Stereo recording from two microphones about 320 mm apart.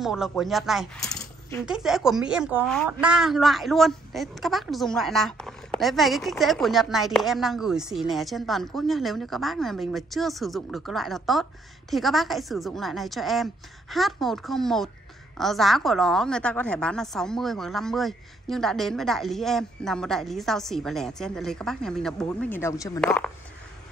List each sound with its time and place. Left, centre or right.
0.0 s speech: centre